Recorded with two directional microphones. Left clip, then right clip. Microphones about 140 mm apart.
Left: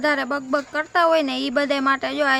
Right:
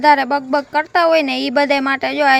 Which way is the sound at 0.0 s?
25° right (ahead or behind).